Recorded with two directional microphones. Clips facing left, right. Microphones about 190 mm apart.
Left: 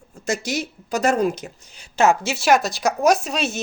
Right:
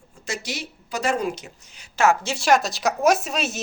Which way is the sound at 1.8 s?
20° left (ahead or behind).